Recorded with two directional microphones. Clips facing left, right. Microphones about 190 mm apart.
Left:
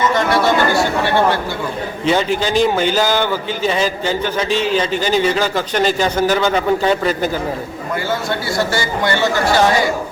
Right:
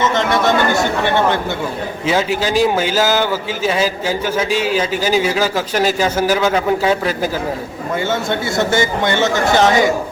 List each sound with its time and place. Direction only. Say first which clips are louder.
0.0 s speech: even; 20° right (ahead or behind)
2.0 s a man's voice: left 1 dB; 5° right (ahead or behind)
8.3 s speech: right 2 dB; 20° right (ahead or behind)